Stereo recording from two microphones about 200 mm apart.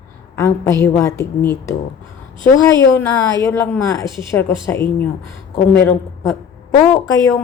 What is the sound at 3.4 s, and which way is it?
A woman's voice, 15° left (ahead or behind).